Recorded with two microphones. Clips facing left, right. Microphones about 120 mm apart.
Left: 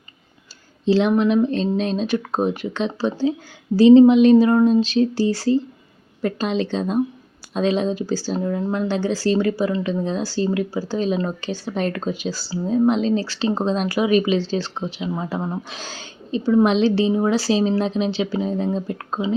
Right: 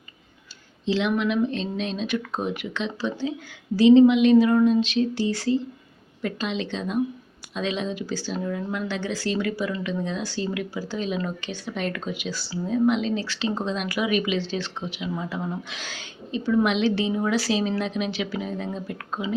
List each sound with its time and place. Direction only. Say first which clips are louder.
0.9 s speech: left 7 dB; 35° left (ahead or behind)